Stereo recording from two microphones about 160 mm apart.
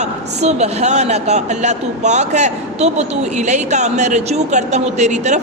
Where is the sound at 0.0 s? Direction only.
45° right (ahead or behind).